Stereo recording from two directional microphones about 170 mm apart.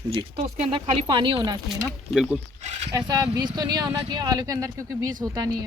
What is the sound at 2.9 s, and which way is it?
Speech, 20° right (ahead or behind).